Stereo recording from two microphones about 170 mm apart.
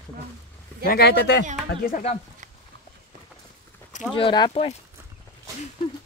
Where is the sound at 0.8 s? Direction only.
70° left (ahead or behind); by 1.4 s 90° left.